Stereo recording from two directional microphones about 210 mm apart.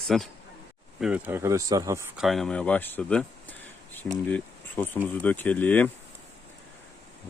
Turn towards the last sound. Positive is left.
turn(degrees=10)  # may be behind; listen again after turning